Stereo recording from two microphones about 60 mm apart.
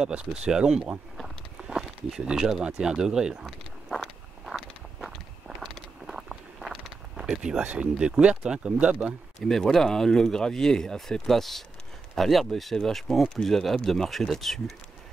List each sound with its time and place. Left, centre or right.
0.0 s speech: centre
1.2 s a sound: centre
2.2 s speech: centre
3.4 s walk: centre
5.6 s a sound: centre
7.6 s speech: right
9.4 s speech: centre